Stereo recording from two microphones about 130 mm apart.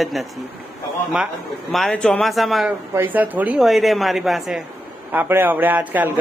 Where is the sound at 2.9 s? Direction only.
15° right (ahead or behind).